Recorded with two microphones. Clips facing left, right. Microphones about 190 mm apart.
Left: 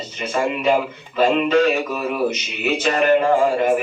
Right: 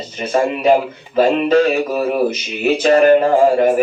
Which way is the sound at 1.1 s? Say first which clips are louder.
Right 3 dB; 40° right (ahead or behind).